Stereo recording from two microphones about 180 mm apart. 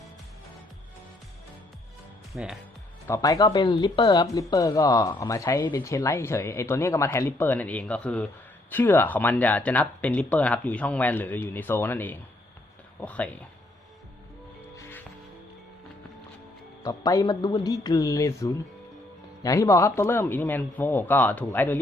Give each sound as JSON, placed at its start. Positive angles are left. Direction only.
{"t": 2.3, "sound": "speech", "side_deg": -5}
{"t": 3.1, "sound": "speech", "side_deg": 20}
{"t": 14.8, "sound": "music", "side_deg": 15}
{"t": 16.8, "sound": "speech", "side_deg": 20}